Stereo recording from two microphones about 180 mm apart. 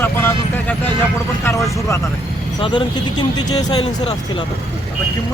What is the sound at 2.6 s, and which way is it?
Speech, 25° left (ahead or behind).